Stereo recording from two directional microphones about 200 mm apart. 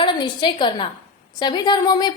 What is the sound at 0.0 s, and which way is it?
A woman's voice, 25° left (ahead or behind).